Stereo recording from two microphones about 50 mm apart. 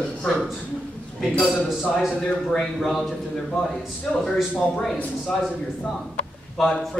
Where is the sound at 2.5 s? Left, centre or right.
Centre.